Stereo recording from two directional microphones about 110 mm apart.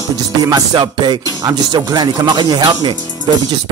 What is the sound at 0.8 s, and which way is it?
Speech, 45° right (ahead or behind).